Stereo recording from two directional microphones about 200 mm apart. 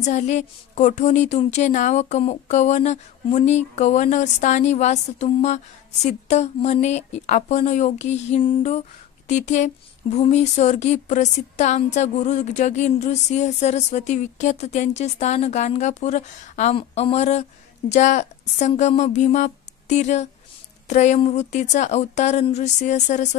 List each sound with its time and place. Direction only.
0.0 s speech: 35° left (ahead or behind)